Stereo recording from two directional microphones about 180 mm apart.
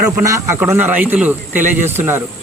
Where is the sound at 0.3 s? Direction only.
15° right (ahead or behind).